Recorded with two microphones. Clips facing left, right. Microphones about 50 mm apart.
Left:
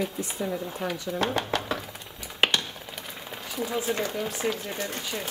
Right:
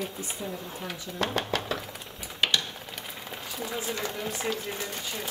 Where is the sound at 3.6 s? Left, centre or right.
Centre.